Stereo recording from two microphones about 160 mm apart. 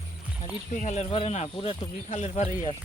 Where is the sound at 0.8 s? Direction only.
50° left (ahead or behind).